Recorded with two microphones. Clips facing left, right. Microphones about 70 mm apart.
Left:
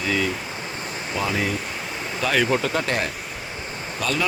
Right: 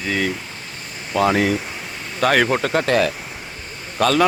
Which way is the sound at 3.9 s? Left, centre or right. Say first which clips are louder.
Right 8 dB; right.